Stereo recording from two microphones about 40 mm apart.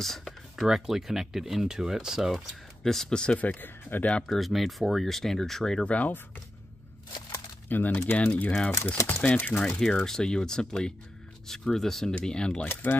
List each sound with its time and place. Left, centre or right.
0.0 s speech: centre
0.6 s speech: centre
2.3 s speech: centre
3.1 s speech: left
3.3 s speech: left
3.9 s speech: left
4.3 s speech: centre
5.9 s speech: left
7.6 s speech: left
8.8 s speech: left
9.5 s speech: centre
12.8 s speech: left